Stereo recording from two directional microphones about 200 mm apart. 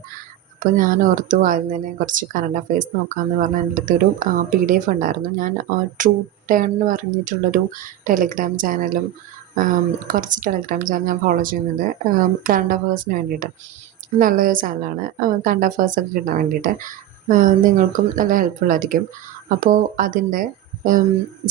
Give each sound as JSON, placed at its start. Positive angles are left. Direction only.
{"t": 0.6, "sound": "a woman's voice", "side_deg": -40}